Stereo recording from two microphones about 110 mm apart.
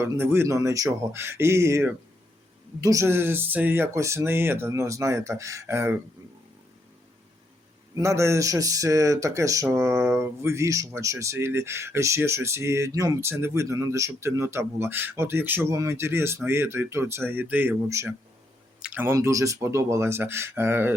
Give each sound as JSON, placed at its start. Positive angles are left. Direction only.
{"t": 0.1, "sound": "speech", "side_deg": -20}
{"t": 7.9, "sound": "speech", "side_deg": -25}
{"t": 17.8, "sound": "speech", "side_deg": -25}
{"t": 18.8, "sound": "a sound", "side_deg": -10}
{"t": 19.0, "sound": "speech", "side_deg": -25}